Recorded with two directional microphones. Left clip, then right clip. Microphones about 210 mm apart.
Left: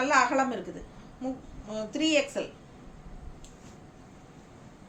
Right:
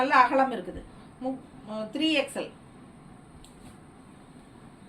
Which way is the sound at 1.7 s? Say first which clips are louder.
Even; 15° left (ahead or behind).